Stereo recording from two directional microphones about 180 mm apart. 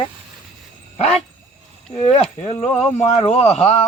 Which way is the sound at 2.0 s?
35° left (ahead or behind).